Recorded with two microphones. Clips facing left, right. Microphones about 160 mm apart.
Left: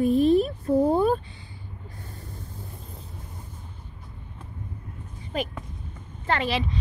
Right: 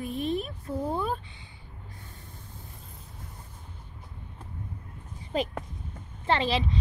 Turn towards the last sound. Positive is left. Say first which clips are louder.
# even
turn(degrees=-25)  # may be behind; listen again after turning